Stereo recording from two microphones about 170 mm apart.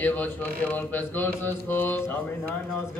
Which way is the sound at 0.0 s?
10° left (ahead or behind).